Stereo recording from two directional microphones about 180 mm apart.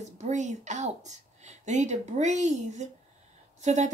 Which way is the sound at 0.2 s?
40° right (ahead or behind).